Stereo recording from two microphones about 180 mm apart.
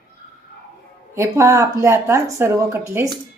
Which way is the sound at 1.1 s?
15° right (ahead or behind).